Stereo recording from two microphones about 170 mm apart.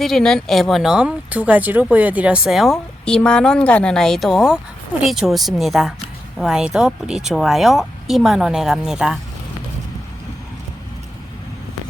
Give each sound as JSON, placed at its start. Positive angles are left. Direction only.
{"t": 0.0, "sound": "speech", "side_deg": 5}